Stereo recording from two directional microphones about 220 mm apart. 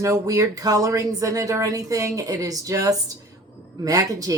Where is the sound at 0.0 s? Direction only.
15° right (ahead or behind).